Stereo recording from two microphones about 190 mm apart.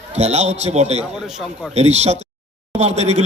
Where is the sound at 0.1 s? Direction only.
35° right (ahead or behind).